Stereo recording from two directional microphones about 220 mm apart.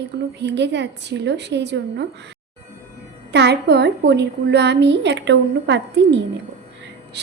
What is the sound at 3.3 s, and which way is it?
A woman's voice, 50° right (ahead or behind).